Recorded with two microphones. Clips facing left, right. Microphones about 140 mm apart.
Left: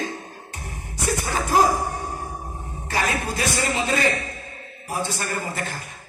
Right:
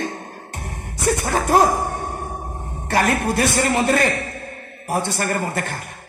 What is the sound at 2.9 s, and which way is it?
A man's voice, 60° right (ahead or behind).